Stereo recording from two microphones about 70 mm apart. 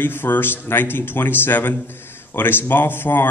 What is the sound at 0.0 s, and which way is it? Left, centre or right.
Speech, left.